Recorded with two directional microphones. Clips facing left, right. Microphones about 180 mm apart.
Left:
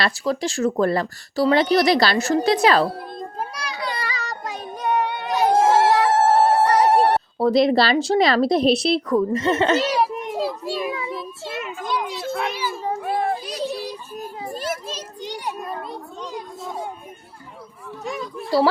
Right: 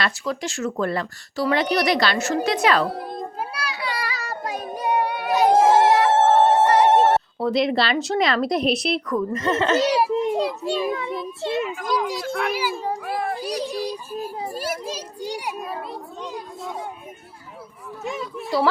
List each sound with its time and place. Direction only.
0.0 s speech: 35° left (ahead or behind)
3.1 s child singing: 5° right (ahead or behind)
5.5 s a sound: 25° right (ahead or behind)
7.3 s speech: 35° left (ahead or behind)
9.8 s children playing: 25° right (ahead or behind)
10.7 s a child's voice: 5° left (ahead or behind)
11.8 s speech: 25° left (ahead or behind)
12.5 s a child's voice: 10° right (ahead or behind)
13.0 s children playing: 30° left (ahead or behind)
13.4 s music: 10° right (ahead or behind)
14.5 s children playing: 10° right (ahead or behind)